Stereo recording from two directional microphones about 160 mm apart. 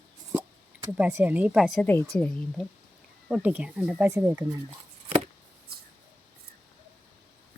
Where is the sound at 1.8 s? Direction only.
10° left (ahead or behind).